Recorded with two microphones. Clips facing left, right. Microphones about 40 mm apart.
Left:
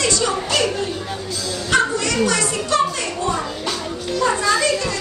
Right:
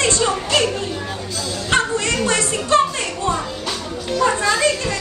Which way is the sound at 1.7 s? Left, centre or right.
Right.